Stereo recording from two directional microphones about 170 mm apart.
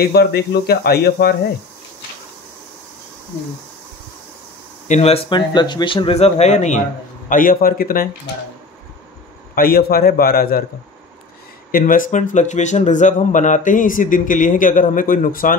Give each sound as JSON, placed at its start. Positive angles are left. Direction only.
{"t": 0.0, "sound": "speech", "side_deg": 70}
{"t": 4.8, "sound": "speech", "side_deg": 40}
{"t": 7.2, "sound": "a man's voice", "side_deg": 55}
{"t": 9.6, "sound": "a man's voice", "side_deg": 60}
{"t": 11.7, "sound": "speech", "side_deg": 50}